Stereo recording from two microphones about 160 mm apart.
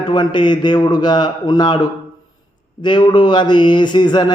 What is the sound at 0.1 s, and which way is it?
A man's voice, 30° left (ahead or behind).